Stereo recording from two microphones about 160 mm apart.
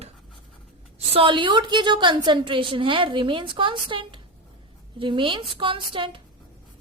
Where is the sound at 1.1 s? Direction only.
35° right (ahead or behind).